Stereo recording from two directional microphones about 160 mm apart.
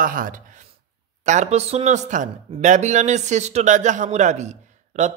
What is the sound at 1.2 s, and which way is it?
Speech, 45° right (ahead or behind).